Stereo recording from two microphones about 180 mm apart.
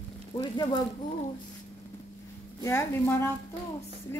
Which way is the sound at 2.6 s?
15° left (ahead or behind).